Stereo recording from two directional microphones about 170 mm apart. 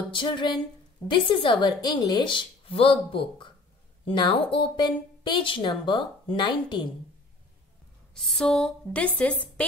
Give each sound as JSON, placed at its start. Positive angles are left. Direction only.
{"t": 0.1, "sound": "speech", "side_deg": 30}
{"t": 8.1, "sound": "speech", "side_deg": 5}